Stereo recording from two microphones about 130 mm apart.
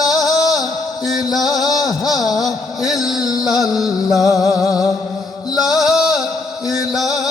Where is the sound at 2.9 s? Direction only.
5° right (ahead or behind).